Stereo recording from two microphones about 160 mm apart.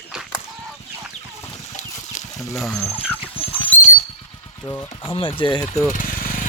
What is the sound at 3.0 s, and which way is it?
Vehicle, 35° left (ahead or behind).